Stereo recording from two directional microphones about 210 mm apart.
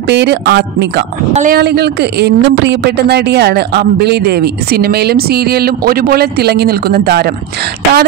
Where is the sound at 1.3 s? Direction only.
45° right (ahead or behind).